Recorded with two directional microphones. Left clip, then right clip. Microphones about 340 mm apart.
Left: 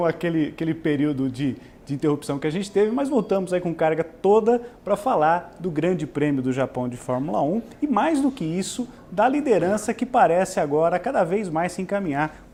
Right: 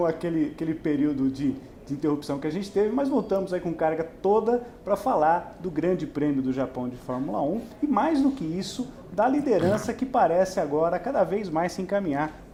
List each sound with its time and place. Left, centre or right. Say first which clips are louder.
0.0 s speech: left 3 dB; left